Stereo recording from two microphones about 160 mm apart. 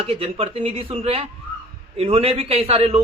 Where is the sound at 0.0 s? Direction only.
35° right (ahead or behind).